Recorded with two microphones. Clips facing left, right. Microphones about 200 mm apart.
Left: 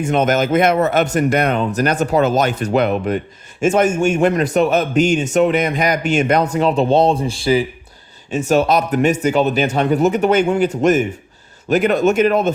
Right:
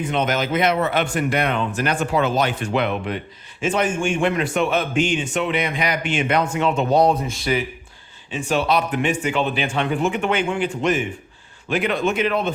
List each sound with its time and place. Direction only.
0.0 s a man's voice: 45° left (ahead or behind)
8.3 s a man's voice: 45° left (ahead or behind)